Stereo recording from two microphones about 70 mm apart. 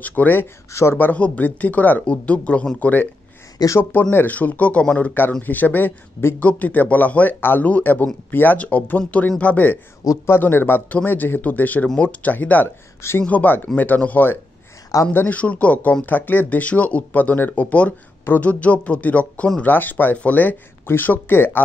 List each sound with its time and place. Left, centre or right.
0.0 s speech: left
3.6 s speech: left
3.9 s speech: left
10.2 s speech: left
12.6 s speech: left